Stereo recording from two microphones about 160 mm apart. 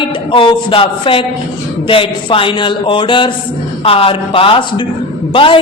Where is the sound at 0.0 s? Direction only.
30° left (ahead or behind).